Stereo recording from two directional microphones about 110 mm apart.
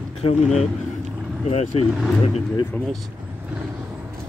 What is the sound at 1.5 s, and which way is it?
Speech, 70° left (ahead or behind).